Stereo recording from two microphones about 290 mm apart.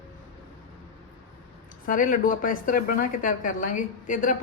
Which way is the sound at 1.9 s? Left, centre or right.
Left.